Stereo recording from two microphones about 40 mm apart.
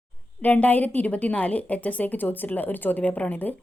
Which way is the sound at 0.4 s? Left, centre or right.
Left.